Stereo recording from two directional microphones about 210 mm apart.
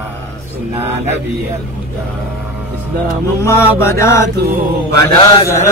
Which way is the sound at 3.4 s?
10° left (ahead or behind).